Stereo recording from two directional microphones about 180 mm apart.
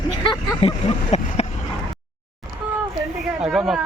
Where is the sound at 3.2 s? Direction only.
Centre (ahead or behind).